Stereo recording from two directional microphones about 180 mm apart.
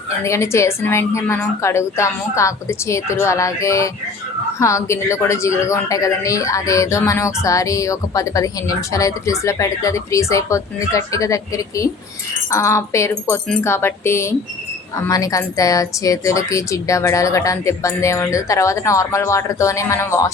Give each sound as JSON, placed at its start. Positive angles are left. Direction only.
{"t": 0.3, "sound": "speech", "side_deg": 15}